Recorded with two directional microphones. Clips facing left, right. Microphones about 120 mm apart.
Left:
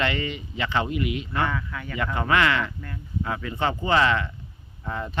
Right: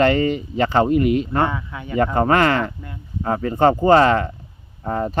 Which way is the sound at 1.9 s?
40° right (ahead or behind).